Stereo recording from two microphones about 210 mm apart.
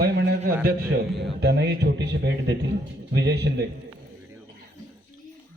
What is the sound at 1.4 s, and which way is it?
A man's voice, 50° right (ahead or behind).